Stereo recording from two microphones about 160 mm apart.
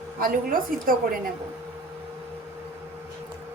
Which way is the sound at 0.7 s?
60° right (ahead or behind).